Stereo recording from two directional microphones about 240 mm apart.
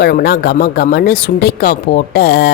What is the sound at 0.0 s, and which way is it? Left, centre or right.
Speech, left.